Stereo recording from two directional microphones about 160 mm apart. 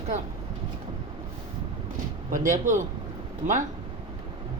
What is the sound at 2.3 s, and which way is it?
Speech, 55° right (ahead or behind).